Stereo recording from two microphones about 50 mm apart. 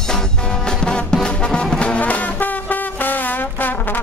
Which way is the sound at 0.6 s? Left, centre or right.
Centre.